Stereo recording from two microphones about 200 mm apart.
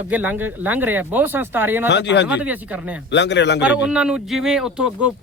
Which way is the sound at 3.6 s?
5° right (ahead or behind).